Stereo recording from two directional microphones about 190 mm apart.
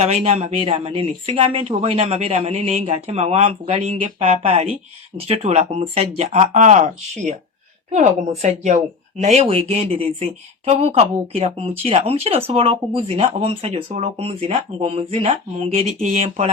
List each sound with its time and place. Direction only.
0.0 s speech: 35° right (ahead or behind)